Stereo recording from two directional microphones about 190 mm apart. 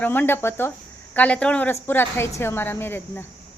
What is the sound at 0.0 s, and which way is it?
A woman's voice, 10° left (ahead or behind).